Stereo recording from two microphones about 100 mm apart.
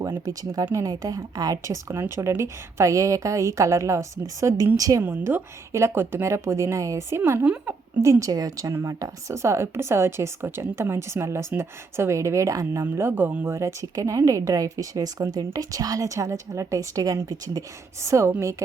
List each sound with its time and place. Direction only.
0.0 s a woman's voice: 35° right (ahead or behind)
5.0 s a woman's voice: 20° right (ahead or behind)
7.4 s a woman's voice: 15° right (ahead or behind)
8.0 s a woman's voice: 30° right (ahead or behind)
12.8 s a woman's voice: 20° right (ahead or behind)